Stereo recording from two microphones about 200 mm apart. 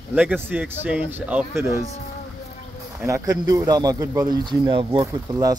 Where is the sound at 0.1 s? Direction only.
10° right (ahead or behind).